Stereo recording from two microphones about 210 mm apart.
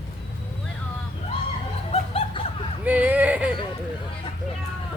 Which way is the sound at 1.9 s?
25° left (ahead or behind).